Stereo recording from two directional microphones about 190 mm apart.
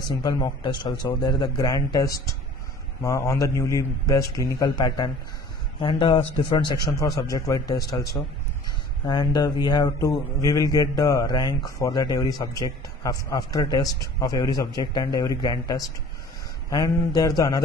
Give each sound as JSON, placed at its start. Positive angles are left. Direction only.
{"t": 0.0, "sound": "a man's voice", "side_deg": 20}